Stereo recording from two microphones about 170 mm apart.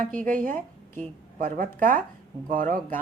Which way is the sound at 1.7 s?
55° right (ahead or behind).